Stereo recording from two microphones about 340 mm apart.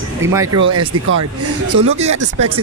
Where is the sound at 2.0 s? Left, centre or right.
Centre.